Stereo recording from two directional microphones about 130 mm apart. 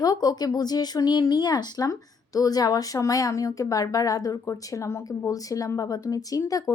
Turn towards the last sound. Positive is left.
turn(degrees=25)  # may be behind; listen again after turning